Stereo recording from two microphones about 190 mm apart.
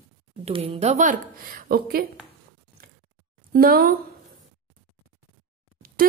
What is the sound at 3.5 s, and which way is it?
Speech, 50° right (ahead or behind).